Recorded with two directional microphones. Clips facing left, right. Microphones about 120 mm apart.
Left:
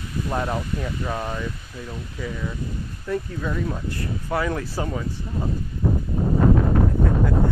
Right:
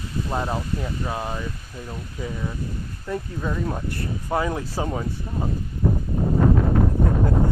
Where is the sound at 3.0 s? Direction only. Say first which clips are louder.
Left 1 dB; 15° right (ahead or behind).